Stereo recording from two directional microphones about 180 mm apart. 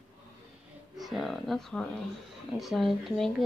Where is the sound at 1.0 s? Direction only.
Centre (ahead or behind).